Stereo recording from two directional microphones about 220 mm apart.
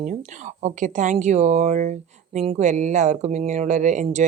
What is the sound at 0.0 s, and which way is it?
Speech, 35° right (ahead or behind).